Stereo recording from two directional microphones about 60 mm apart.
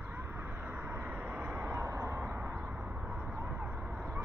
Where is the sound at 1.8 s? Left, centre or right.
Right.